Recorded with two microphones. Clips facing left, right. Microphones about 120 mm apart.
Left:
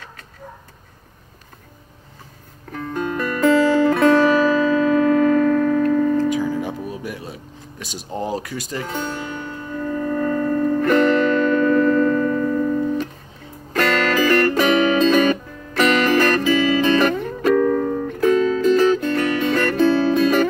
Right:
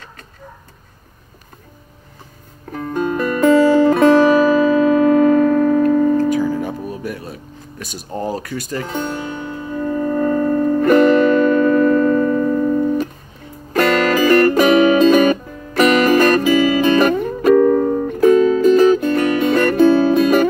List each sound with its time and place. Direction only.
2.7 s music: 10° right (ahead or behind)
7.0 s music: 15° left (ahead or behind)
8.1 s speech: 15° left (ahead or behind)
8.8 s music: 10° right (ahead or behind)
13.7 s music: 10° right (ahead or behind)
17.6 s music: 20° right (ahead or behind)
18.1 s music: 10° right (ahead or behind)